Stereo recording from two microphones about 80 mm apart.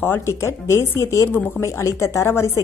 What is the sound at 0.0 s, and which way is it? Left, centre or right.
A woman's voice, left.